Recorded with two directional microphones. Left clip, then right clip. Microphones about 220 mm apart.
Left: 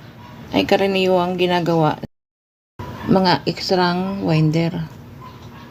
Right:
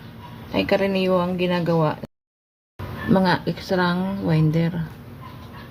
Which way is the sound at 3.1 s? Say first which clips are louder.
Left 4 dB; 20° left (ahead or behind).